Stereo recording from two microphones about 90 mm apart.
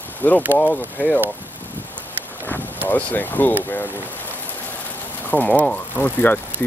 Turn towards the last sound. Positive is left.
turn(degrees=20)  # may be behind; listen again after turning